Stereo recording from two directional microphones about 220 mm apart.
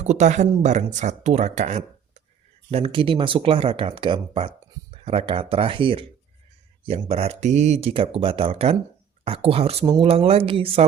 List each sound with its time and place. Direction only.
0.0 s speech: 30° right (ahead or behind)